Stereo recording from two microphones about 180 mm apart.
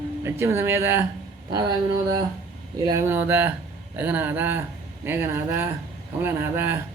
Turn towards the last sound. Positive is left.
turn(degrees=-10)  # may be behind; listen again after turning